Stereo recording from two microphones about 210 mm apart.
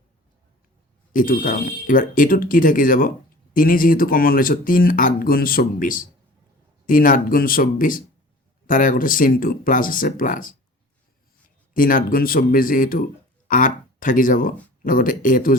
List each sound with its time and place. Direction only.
1.1 s speech: 40° left (ahead or behind)
11.7 s speech: 40° left (ahead or behind)